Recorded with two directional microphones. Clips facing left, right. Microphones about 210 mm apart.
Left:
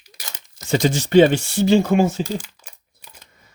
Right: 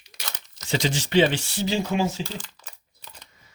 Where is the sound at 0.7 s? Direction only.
45° left (ahead or behind).